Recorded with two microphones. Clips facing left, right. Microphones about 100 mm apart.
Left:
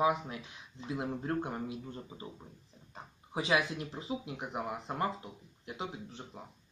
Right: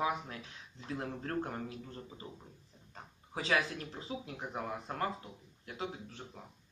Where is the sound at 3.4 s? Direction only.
20° left (ahead or behind).